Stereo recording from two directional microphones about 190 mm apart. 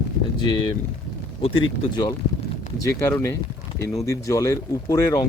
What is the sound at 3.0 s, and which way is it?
Speech, 15° left (ahead or behind).